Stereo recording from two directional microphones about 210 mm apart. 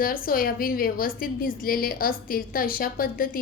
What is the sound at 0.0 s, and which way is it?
A woman's voice, 45° left (ahead or behind).